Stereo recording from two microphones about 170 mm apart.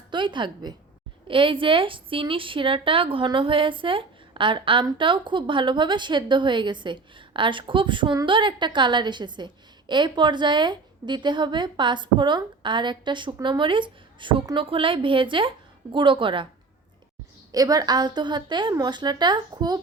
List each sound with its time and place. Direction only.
0.1 s a woman's voice: 25° right (ahead or behind)
17.5 s a woman's voice: 20° right (ahead or behind)